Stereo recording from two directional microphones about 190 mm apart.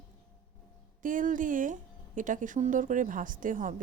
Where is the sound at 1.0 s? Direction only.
45° right (ahead or behind).